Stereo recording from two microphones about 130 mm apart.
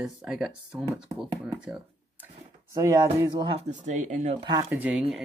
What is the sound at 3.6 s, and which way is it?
Speech, 65° right (ahead or behind).